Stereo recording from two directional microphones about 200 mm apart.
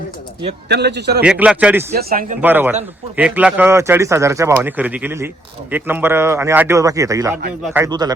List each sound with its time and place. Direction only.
0.7 s a man's voice: 55° right (ahead or behind)
1.2 s speech: 5° right (ahead or behind)
2.0 s speech: 45° right (ahead or behind)
2.4 s speech: 10° right (ahead or behind)
7.9 s speech: 20° right (ahead or behind)